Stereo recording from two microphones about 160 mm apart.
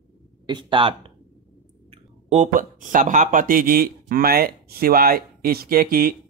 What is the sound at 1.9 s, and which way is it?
Speech, 45° right (ahead or behind).